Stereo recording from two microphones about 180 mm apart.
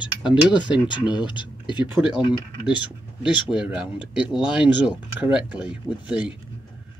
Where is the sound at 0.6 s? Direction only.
25° left (ahead or behind).